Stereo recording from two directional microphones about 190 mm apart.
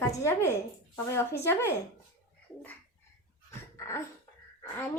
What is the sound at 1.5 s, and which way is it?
Speech, 15° left (ahead or behind).